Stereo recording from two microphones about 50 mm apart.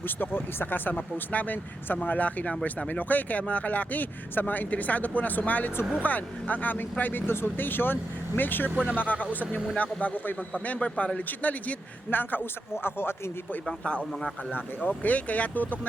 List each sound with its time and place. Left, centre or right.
0.0 s speech: left
8.7 s speech: right
9.0 s speech: left
12.7 s speech: left
14.1 s speech: centre
14.5 s speech: left